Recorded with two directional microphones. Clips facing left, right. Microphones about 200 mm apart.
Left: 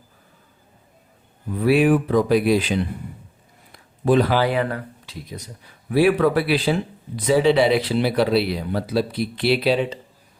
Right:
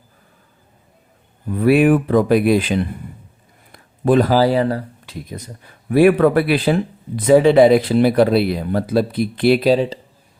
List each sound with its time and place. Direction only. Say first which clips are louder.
1.6 s speech: right 4 dB; 55° right (ahead or behind); by 4.9 s 35° right (ahead or behind)
5.0 s speech: right 4 dB; 55° right (ahead or behind); by 10.0 s 35° right (ahead or behind)